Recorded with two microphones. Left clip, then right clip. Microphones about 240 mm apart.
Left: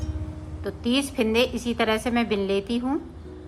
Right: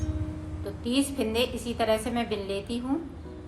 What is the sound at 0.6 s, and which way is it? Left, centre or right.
A woman's voice, centre.